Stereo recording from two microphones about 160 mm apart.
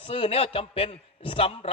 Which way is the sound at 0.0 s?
35° left (ahead or behind).